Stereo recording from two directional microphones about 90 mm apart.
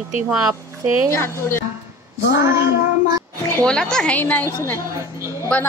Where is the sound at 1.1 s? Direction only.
25° left (ahead or behind).